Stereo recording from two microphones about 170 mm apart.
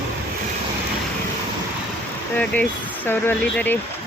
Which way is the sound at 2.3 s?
10° left (ahead or behind).